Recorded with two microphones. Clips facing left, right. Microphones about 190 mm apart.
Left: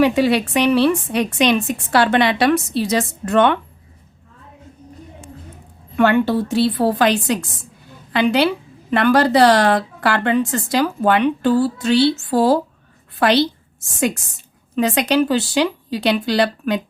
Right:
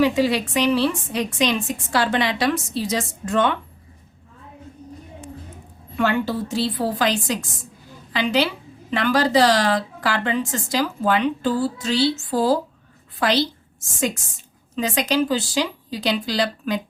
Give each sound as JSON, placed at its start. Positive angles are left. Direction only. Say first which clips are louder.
{"t": 0.0, "sound": "a woman's voice", "louder": "left 3 dB", "side_deg": 65}
{"t": 6.0, "sound": "a woman's voice", "louder": "left 6 dB", "side_deg": 60}